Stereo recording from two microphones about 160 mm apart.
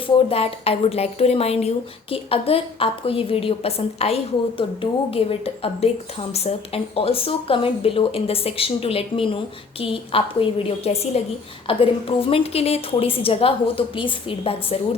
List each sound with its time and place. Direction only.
0.3 s a woman's voice: 40° left (ahead or behind)